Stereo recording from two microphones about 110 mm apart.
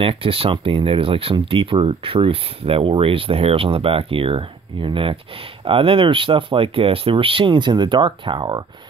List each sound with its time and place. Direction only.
0.0 s speech: 55° right (ahead or behind)